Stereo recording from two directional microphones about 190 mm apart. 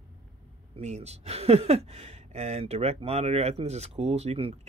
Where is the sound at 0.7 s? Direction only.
35° right (ahead or behind).